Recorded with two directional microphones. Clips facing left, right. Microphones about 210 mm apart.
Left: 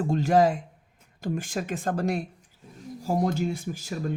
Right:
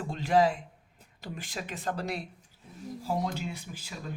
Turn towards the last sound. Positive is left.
turn(degrees=45)  # may be behind; listen again after turning